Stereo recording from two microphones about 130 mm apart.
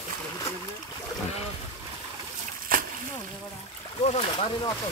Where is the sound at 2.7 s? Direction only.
90° right.